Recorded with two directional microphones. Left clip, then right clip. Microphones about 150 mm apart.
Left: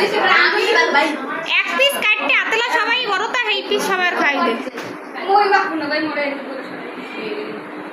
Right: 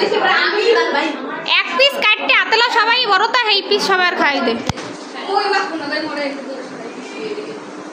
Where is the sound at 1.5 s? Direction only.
25° right (ahead or behind).